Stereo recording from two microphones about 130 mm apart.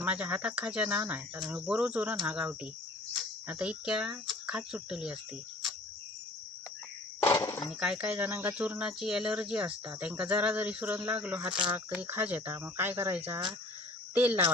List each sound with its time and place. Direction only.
0.0 s speech: 10° right (ahead or behind)
7.2 s a sound: 25° left (ahead or behind)
7.7 s speech: 5° right (ahead or behind)